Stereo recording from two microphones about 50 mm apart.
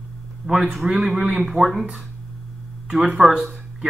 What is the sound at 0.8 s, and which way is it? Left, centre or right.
Speech, centre.